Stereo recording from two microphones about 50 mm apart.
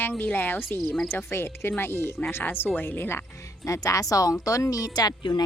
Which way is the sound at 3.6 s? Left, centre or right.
Left.